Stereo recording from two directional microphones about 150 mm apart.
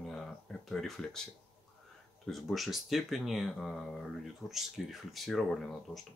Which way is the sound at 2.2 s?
Centre (ahead or behind).